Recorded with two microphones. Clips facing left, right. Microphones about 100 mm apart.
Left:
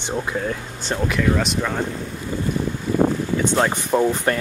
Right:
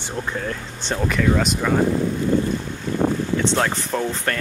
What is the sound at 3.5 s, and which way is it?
Speech, 15° left (ahead or behind).